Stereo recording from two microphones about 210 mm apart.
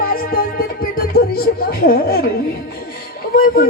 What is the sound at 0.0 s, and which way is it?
Music, 45° left (ahead or behind).